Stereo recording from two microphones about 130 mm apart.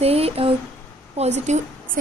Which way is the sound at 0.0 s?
50° right (ahead or behind).